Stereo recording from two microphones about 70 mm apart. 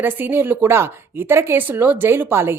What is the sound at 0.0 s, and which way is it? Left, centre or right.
A woman's voice, right.